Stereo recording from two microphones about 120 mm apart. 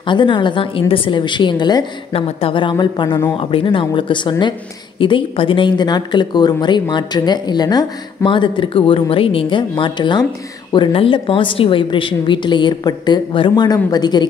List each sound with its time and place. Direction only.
0.0 s speech: 40° left (ahead or behind)
2.1 s a woman's voice: 50° left (ahead or behind)